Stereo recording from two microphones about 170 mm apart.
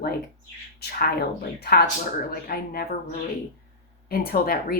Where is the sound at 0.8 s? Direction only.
70° left (ahead or behind).